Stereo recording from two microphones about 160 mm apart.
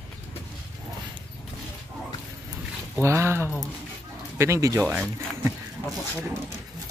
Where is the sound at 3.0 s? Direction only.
15° right (ahead or behind).